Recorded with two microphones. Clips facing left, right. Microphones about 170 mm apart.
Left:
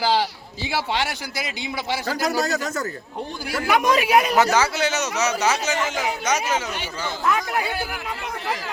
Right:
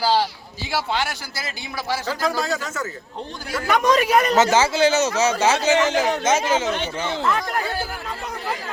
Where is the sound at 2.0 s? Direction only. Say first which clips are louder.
Left 2 dB; 40° left (ahead or behind).